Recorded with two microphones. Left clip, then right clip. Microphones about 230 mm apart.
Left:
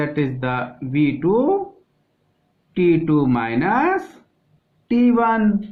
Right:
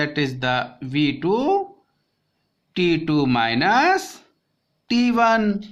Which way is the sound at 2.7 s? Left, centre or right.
Right.